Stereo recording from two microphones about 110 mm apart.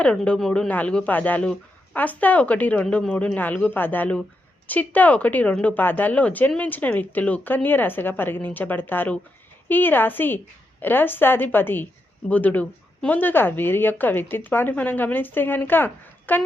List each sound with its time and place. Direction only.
0.0 s speech: 10° left (ahead or behind)
2.8 s speech: 5° left (ahead or behind)
3.1 s speech: 15° left (ahead or behind)